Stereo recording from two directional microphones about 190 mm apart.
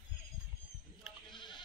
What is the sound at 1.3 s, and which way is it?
Sheep, 25° left (ahead or behind).